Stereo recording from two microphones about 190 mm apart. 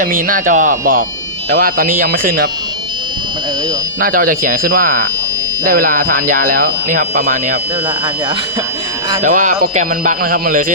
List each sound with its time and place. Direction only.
0.0 s speech: 45° right (ahead or behind)
4.0 s speech: 50° right (ahead or behind)
9.2 s speech: 40° right (ahead or behind)